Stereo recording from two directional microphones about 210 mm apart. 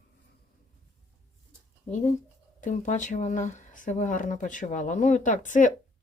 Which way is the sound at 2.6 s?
35° left (ahead or behind).